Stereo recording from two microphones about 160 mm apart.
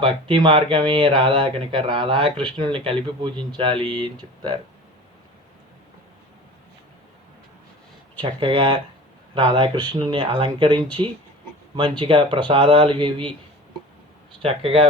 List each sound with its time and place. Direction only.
0.0 s speech: 30° right (ahead or behind)
8.2 s speech: 35° right (ahead or behind)
14.4 s speech: 35° right (ahead or behind)